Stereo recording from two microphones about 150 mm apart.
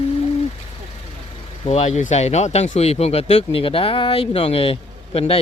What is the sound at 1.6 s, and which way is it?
Speech, 45° left (ahead or behind).